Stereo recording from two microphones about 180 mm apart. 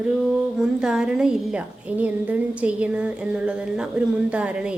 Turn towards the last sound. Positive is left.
turn(degrees=-5)  # may be behind; listen again after turning